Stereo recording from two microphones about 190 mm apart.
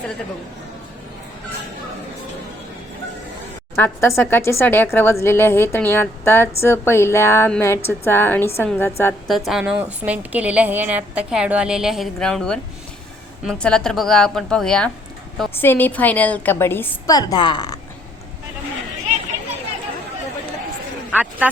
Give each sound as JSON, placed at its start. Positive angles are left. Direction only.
{"t": 3.8, "sound": "speech", "side_deg": 15}
{"t": 9.5, "sound": "a woman's voice", "side_deg": -5}
{"t": 21.1, "sound": "speech", "side_deg": -10}